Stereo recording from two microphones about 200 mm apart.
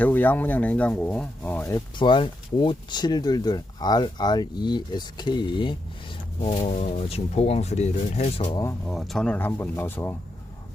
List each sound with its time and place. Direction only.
0.0 s speech: 10° left (ahead or behind)
2.0 s speech: 25° left (ahead or behind)
8.9 s speech: centre (ahead or behind)